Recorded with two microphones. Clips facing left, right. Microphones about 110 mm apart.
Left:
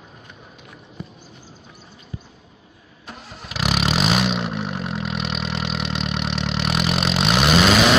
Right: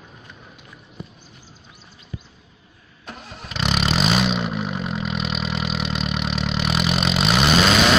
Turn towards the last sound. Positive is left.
turn(degrees=0)  # may be behind; listen again after turning